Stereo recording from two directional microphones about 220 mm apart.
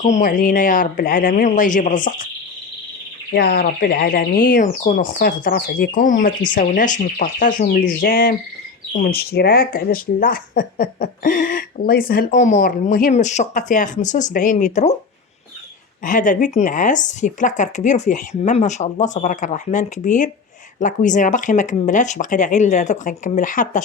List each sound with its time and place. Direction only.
0.0 s speech: 35° left (ahead or behind)
3.3 s speech: 45° left (ahead or behind)
16.0 s speech: 35° left (ahead or behind)